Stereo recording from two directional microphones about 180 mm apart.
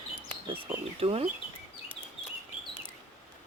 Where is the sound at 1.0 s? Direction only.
35° right (ahead or behind).